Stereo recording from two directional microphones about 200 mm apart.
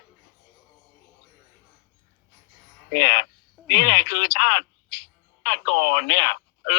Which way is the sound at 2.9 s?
55° left (ahead or behind).